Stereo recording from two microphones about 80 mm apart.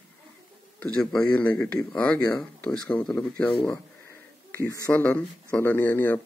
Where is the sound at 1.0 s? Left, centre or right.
Centre.